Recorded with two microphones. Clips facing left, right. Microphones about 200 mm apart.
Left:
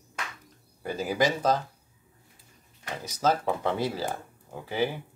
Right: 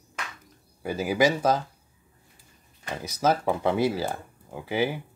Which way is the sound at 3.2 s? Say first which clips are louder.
Right 2 dB; 10° right (ahead or behind).